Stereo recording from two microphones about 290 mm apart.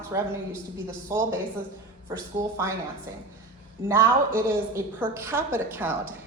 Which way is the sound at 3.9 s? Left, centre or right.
Centre.